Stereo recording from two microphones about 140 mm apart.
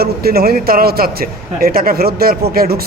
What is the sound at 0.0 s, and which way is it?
Speech, 90° right.